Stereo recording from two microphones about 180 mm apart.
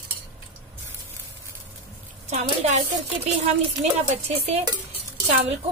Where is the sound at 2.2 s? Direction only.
40° right (ahead or behind).